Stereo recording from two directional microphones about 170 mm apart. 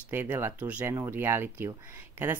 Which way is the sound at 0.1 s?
15° right (ahead or behind).